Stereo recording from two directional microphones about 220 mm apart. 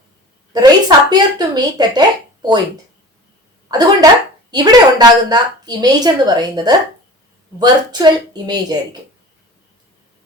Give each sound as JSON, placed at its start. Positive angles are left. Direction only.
{"t": 0.5, "sound": "a woman's voice", "side_deg": -20}
{"t": 3.7, "sound": "a woman's voice", "side_deg": -20}